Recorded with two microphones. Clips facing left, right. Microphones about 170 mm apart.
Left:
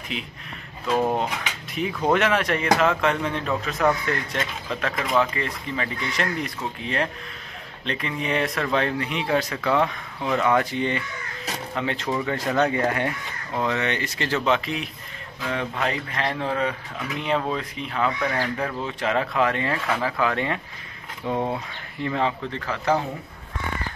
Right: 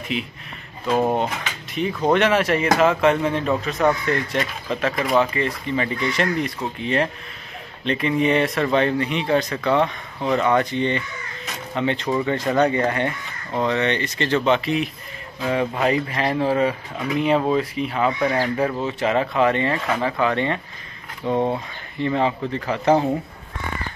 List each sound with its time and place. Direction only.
0.1 s a man's voice: centre (ahead or behind)
1.4 s a man's voice: 5° left (ahead or behind)
15.4 s a man's voice: 15° right (ahead or behind); by 21.4 s 5° left (ahead or behind)
22.0 s a man's voice: 5° right (ahead or behind)
22.7 s speech: 20° right (ahead or behind)